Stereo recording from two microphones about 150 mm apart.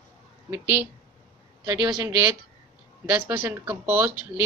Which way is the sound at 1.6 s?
30° right (ahead or behind).